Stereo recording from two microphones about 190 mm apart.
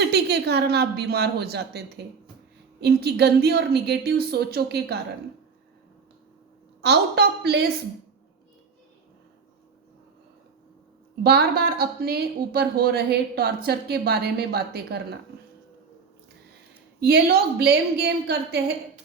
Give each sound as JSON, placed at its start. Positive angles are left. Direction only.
{"t": 0.0, "sound": "a woman's voice", "side_deg": -60}
{"t": 2.8, "sound": "a woman's voice", "side_deg": -60}
{"t": 6.8, "sound": "a woman's voice", "side_deg": -60}
{"t": 11.2, "sound": "a woman's voice", "side_deg": -55}
{"t": 17.0, "sound": "a woman's voice", "side_deg": -55}